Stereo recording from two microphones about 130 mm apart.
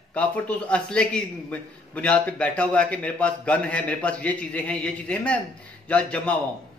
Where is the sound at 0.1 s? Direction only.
10° left (ahead or behind).